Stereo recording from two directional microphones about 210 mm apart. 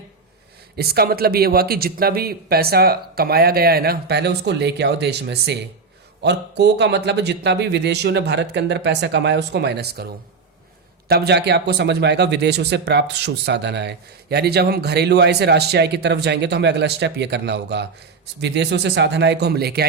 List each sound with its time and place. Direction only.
0.8 s speech: 50° right (ahead or behind)
11.1 s speech: 50° right (ahead or behind)